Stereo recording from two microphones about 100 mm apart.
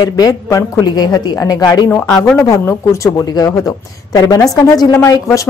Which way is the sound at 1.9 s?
15° left (ahead or behind).